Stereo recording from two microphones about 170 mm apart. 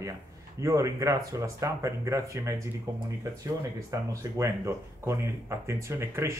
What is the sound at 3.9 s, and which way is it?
Speech, 20° right (ahead or behind).